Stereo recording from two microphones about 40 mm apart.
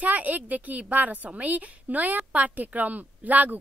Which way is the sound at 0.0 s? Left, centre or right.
Right.